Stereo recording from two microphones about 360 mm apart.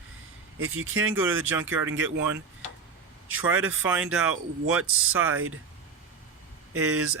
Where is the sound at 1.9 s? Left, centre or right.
Right.